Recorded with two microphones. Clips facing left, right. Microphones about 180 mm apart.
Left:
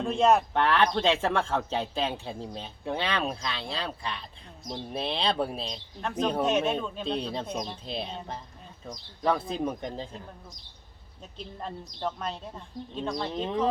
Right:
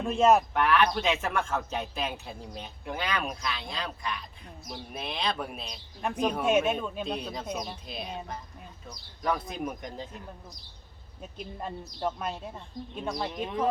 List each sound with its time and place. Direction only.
0.0 s speech: 5° right (ahead or behind)
0.5 s speech: 30° left (ahead or behind)
6.0 s speech: 10° right (ahead or behind)
7.0 s speech: 30° left (ahead or behind)
7.4 s speech: 5° right (ahead or behind)
7.9 s speech: 30° left (ahead or behind)
11.2 s speech: 10° right (ahead or behind)